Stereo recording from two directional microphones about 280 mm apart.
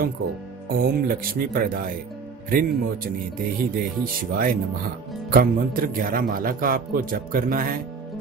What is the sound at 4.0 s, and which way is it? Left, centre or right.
Speech, right.